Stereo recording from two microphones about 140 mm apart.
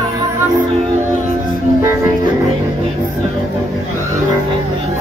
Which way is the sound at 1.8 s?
20° right (ahead or behind).